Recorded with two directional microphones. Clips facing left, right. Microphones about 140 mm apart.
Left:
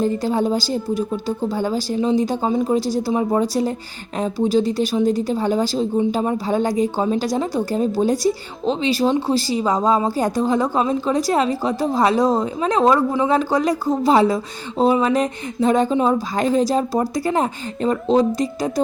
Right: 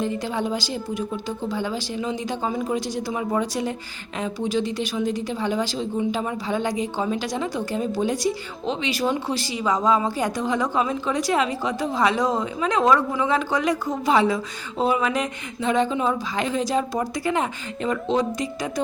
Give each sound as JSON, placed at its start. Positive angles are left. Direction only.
{"t": 0.0, "sound": "speech", "side_deg": 40}